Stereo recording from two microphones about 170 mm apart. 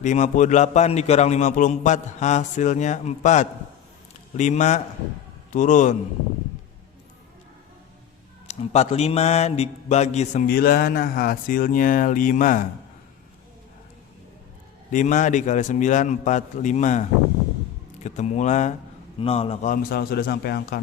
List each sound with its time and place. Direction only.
0.0 s a man's voice: 45° left (ahead or behind)
8.4 s speech: 40° left (ahead or behind)
10.4 s speech: 60° left (ahead or behind)
14.9 s a man's voice: 50° left (ahead or behind)
19.6 s speech: 60° left (ahead or behind)